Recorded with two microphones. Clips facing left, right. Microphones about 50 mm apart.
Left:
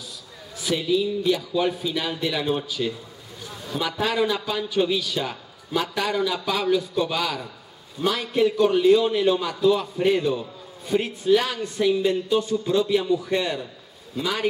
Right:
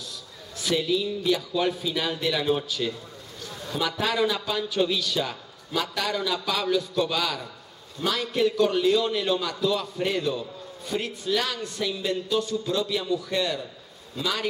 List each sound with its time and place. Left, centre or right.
0.6 s a man's voice: centre; by 13.7 s left